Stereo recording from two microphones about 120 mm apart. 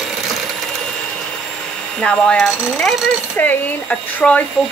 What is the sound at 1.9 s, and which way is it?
Speech, 5° left (ahead or behind).